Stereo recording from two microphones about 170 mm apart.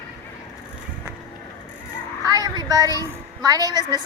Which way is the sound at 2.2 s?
20° right (ahead or behind).